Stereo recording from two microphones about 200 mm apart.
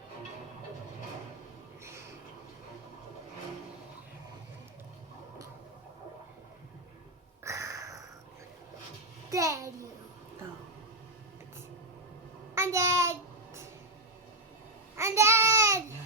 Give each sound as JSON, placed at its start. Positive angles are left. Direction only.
{"t": 7.4, "sound": "a sound", "side_deg": -15}
{"t": 9.3, "sound": "a child's voice", "side_deg": -15}
{"t": 12.5, "sound": "child singing", "side_deg": -15}
{"t": 14.9, "sound": "babbling", "side_deg": -15}